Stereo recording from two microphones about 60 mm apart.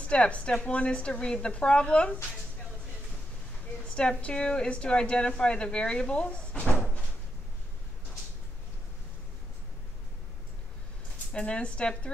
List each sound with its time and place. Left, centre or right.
0.0 s a woman's voice: left
3.9 s a woman's voice: centre
11.3 s a woman's voice: centre